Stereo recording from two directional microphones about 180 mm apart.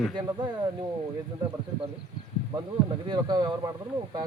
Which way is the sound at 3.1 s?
25° right (ahead or behind).